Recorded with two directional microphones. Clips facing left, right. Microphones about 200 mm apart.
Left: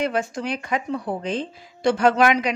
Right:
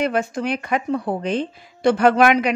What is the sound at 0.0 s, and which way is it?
A woman's voice, 60° right (ahead or behind).